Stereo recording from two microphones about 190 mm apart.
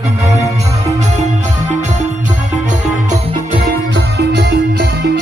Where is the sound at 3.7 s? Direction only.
60° right (ahead or behind).